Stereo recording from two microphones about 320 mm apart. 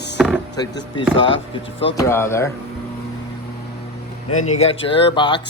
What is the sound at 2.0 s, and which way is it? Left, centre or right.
Speech, centre.